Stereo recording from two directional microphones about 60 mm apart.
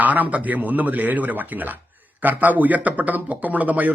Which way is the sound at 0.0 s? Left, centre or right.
Right.